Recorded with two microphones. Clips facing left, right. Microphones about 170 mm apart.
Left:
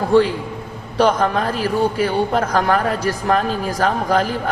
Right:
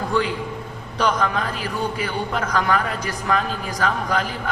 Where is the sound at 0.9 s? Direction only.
45° left (ahead or behind).